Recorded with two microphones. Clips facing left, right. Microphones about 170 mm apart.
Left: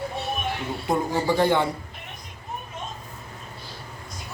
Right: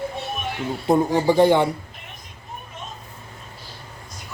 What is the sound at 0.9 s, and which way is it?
Speech, 20° right (ahead or behind).